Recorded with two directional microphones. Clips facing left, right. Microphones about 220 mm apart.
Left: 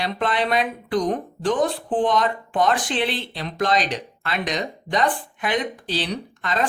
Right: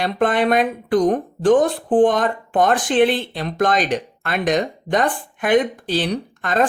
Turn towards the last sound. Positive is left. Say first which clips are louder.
# right 5 dB
turn(degrees=-50)  # may be behind; listen again after turning